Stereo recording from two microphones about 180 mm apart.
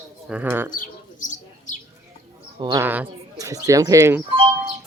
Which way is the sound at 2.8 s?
10° right (ahead or behind).